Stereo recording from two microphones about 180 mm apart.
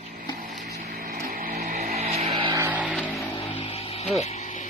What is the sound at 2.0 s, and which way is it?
Music, 35° right (ahead or behind).